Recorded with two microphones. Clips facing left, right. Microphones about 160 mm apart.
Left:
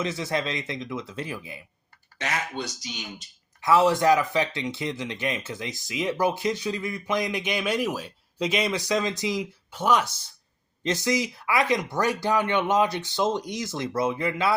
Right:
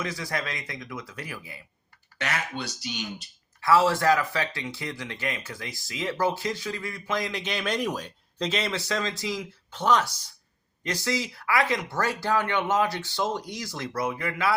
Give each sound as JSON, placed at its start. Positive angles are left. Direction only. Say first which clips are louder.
{"t": 0.0, "sound": "speech", "louder": "left 4 dB", "side_deg": 25}
{"t": 3.6, "sound": "speech", "louder": "left 2 dB", "side_deg": 20}